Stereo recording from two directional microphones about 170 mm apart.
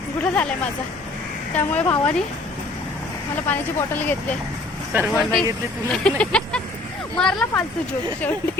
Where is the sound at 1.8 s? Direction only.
10° left (ahead or behind).